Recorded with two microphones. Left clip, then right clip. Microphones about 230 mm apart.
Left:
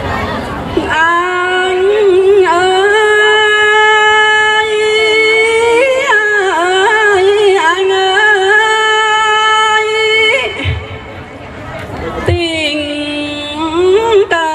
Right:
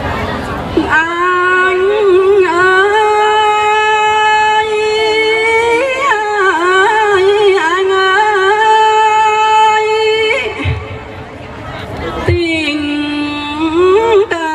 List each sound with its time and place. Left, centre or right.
0.9 s a sound: left
7.6 s music: left
12.3 s music: left
14.1 s music: left